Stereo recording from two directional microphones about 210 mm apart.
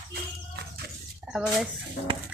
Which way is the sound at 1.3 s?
Centre (ahead or behind).